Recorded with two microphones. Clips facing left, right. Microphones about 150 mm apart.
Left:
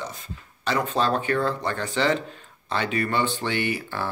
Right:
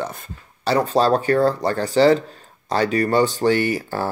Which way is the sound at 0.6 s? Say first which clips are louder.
Right 6 dB; 35° right (ahead or behind).